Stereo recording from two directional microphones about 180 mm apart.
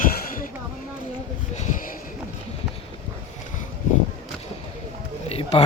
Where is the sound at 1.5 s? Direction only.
40° left (ahead or behind).